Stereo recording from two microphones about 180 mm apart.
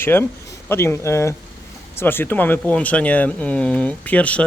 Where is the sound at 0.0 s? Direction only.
10° left (ahead or behind).